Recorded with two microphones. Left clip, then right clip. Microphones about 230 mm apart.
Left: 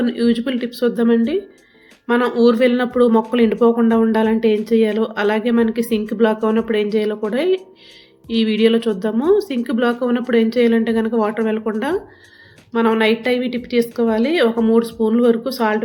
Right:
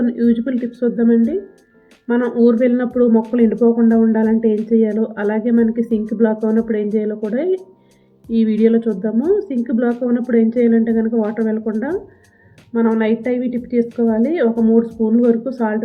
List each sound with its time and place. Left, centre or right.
0.0 s speech: centre